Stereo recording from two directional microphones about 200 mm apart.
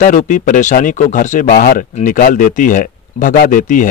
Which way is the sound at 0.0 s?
40° left (ahead or behind).